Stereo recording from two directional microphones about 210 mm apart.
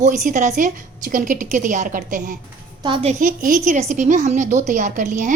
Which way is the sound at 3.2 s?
40° right (ahead or behind).